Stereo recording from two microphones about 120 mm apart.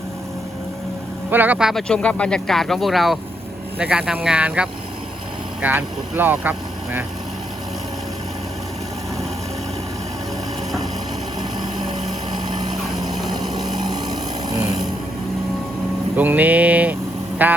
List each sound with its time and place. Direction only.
1.3 s speech: 15° right (ahead or behind)
1.9 s speech: 10° left (ahead or behind); by 7.0 s 15° right (ahead or behind)
12.7 s a sound: centre (ahead or behind)
13.3 s vehicle: 35° right (ahead or behind)
16.1 s speech: 15° right (ahead or behind)